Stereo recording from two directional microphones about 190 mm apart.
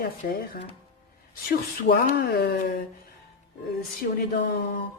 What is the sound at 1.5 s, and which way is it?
Speech, 50° left (ahead or behind).